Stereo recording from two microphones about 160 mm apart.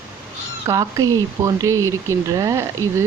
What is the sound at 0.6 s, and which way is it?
Speech, 20° right (ahead or behind).